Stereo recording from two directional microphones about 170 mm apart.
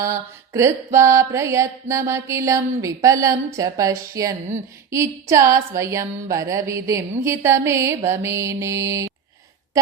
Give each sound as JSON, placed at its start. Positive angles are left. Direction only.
{"t": 0.5, "sound": "mantra", "side_deg": -15}